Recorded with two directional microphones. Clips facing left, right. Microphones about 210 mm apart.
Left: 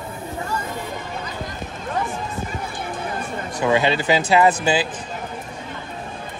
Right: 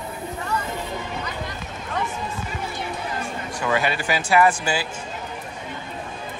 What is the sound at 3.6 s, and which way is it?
Speech, 20° left (ahead or behind).